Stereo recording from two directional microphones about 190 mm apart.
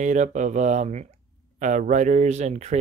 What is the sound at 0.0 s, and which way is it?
Speech, 40° right (ahead or behind).